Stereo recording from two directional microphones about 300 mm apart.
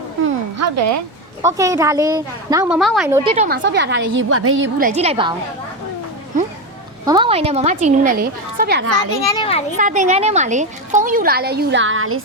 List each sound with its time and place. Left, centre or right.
0.6 s speech: right
1.4 s a woman's voice: centre
3.2 s a woman's voice: right
3.6 s a woman's voice: right
4.8 s a woman's voice: right
7.0 s a woman's voice: centre; by 8.9 s right
9.2 s a child's voice: centre
9.7 s a woman's voice: right